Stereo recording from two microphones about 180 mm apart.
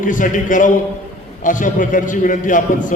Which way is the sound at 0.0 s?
45° left (ahead or behind).